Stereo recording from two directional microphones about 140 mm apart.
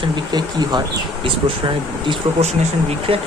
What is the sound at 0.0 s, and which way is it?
Speech, 30° right (ahead or behind).